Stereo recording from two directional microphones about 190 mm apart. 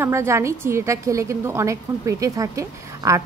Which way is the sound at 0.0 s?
15° right (ahead or behind).